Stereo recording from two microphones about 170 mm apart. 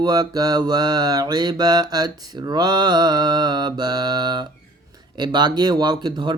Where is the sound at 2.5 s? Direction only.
25° right (ahead or behind).